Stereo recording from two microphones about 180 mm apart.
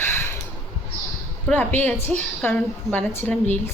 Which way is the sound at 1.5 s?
10° left (ahead or behind).